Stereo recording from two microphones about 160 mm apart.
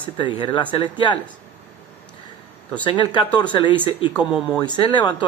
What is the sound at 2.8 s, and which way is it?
Speech, 30° left (ahead or behind).